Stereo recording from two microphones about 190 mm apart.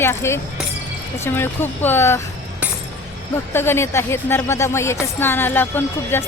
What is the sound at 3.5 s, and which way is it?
Speech, 10° left (ahead or behind).